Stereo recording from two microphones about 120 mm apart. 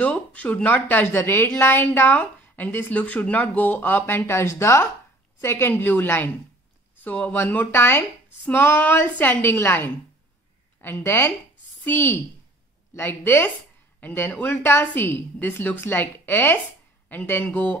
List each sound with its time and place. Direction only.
0.0 s a woman's voice: 10° left (ahead or behind)